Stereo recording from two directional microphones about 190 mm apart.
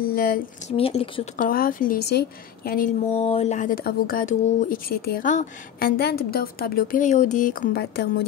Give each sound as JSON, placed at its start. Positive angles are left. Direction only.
{"t": 0.0, "sound": "speech", "side_deg": 50}
{"t": 0.7, "sound": "a woman's voice", "side_deg": 30}
{"t": 1.4, "sound": "speech", "side_deg": 50}
{"t": 3.1, "sound": "speech", "side_deg": 35}